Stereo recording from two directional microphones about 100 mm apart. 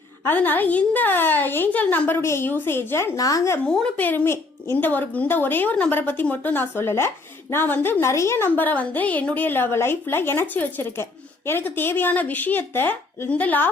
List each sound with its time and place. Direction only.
0.3 s a woman's voice: 20° left (ahead or behind)
3.2 s speech: 35° left (ahead or behind)
3.7 s a woman's voice: 15° left (ahead or behind)